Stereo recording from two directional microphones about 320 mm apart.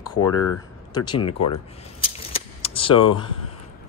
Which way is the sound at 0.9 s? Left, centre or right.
Centre.